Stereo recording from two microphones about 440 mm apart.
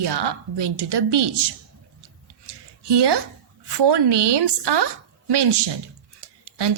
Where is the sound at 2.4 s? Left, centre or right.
Right.